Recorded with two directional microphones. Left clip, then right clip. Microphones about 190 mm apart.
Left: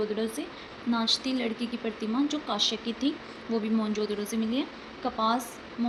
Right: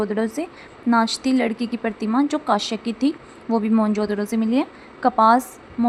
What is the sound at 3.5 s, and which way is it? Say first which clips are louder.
Speech: right 9 dB; 50° right (ahead or behind).